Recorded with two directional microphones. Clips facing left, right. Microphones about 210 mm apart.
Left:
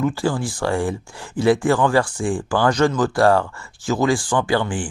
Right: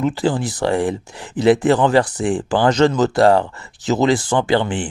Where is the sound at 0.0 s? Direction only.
20° right (ahead or behind).